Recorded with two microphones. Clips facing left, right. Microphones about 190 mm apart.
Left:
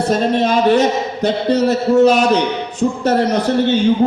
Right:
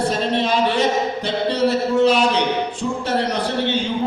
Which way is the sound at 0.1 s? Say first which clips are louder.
Left 5 dB; 45° left (ahead or behind).